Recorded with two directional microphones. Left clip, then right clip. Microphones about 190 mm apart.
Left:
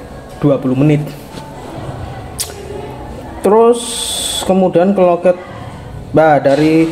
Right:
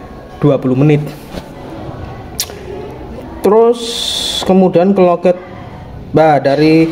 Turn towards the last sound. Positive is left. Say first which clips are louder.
# right 1 dB
turn(degrees=-15)  # may be behind; listen again after turning